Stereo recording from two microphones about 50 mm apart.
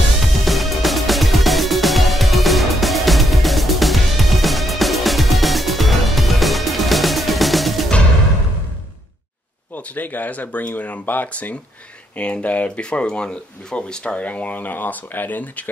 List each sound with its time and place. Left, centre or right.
0.5 s music: centre
9.8 s speech: left